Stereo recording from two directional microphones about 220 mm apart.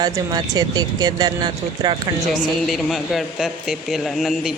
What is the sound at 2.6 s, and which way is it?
A man's voice, centre (ahead or behind).